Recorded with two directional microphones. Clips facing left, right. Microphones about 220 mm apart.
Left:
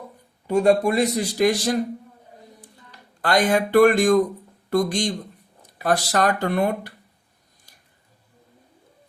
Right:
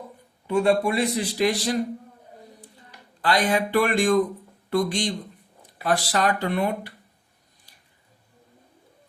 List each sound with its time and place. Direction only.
0.4 s speech: 40° left (ahead or behind)
3.2 s speech: 45° left (ahead or behind)